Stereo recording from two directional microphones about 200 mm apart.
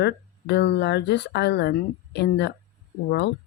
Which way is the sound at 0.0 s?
55° left (ahead or behind).